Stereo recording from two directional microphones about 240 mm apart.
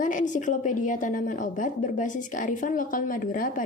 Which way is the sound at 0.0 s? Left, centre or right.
Left.